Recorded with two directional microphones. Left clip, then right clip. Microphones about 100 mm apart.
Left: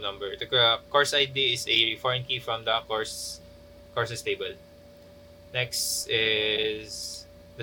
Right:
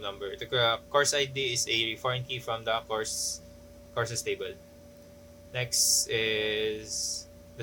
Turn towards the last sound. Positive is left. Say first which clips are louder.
# right 3 dB
turn(degrees=30)  # may be behind; listen again after turning